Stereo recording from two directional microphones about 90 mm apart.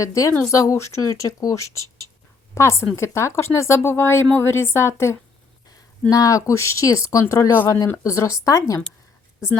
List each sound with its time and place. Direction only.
0.0 s a woman's voice: 40° left (ahead or behind)
6.1 s speech: 40° left (ahead or behind)